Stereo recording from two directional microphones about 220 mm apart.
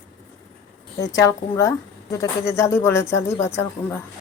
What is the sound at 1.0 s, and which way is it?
A woman's voice, 15° left (ahead or behind).